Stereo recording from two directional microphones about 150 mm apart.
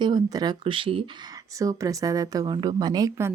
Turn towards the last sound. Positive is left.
turn(degrees=-20)  # may be behind; listen again after turning